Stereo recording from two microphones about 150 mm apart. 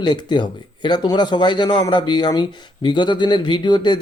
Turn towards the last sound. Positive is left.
turn(degrees=30)  # may be behind; listen again after turning